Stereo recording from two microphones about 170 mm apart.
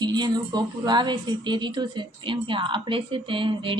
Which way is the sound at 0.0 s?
25° right (ahead or behind).